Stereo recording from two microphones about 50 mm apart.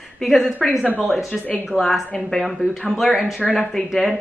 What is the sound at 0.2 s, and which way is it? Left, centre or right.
Speech, centre.